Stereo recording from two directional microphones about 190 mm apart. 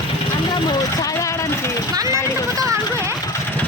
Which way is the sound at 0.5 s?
20° left (ahead or behind).